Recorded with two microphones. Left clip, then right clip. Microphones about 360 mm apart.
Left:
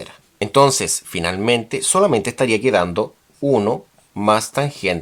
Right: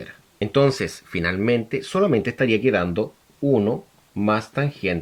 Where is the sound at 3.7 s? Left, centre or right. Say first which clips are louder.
Left 4 dB; left.